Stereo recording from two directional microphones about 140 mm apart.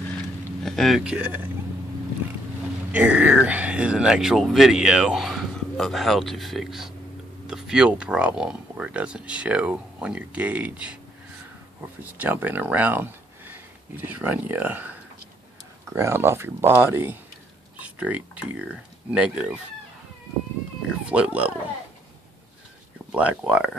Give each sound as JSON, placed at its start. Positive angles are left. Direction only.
{"t": 0.7, "sound": "speech", "side_deg": 0}
{"t": 2.9, "sound": "speech", "side_deg": -10}
{"t": 12.0, "sound": "speech", "side_deg": -10}
{"t": 21.1, "sound": "speech", "side_deg": -10}
{"t": 23.1, "sound": "speech", "side_deg": -10}